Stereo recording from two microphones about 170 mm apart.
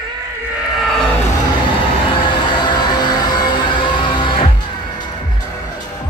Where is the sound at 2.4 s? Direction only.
25° left (ahead or behind).